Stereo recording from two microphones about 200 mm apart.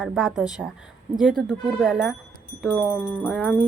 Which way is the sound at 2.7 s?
10° left (ahead or behind).